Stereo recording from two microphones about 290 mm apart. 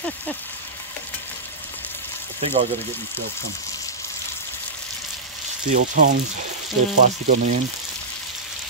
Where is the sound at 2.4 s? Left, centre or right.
Centre.